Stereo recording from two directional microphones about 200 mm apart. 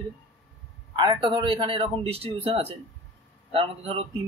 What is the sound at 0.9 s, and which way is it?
Speech, 20° right (ahead or behind).